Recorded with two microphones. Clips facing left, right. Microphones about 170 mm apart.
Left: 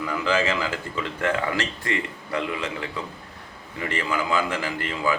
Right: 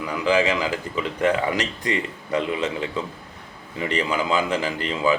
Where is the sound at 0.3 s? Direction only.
15° right (ahead or behind).